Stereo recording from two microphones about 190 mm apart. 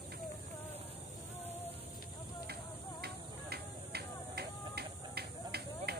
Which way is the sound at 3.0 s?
55° right (ahead or behind).